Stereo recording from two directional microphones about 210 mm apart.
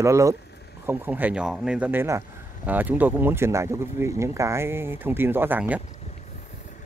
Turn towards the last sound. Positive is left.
turn(degrees=-10)  # may be behind; listen again after turning